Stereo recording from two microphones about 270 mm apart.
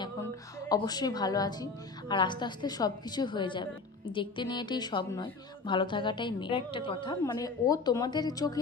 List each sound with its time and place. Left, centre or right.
0.7 s a woman's voice: centre